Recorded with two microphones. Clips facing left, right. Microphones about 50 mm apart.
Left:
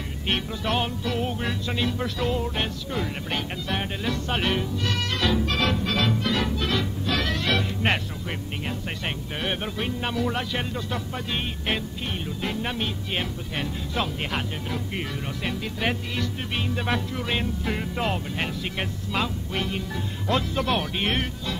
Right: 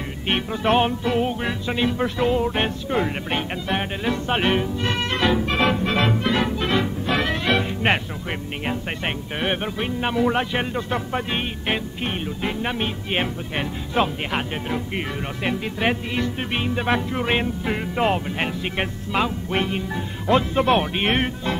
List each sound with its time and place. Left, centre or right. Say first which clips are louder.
0.3 s music: right 6 dB; right
12.4 s music: right 3 dB; right
17.6 s music: right 7 dB; right